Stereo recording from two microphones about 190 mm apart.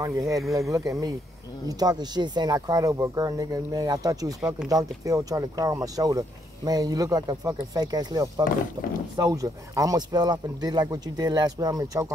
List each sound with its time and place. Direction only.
0.0 s speech: 15° right (ahead or behind)
4.4 s speech: 5° right (ahead or behind)
4.6 s speech: 20° right (ahead or behind)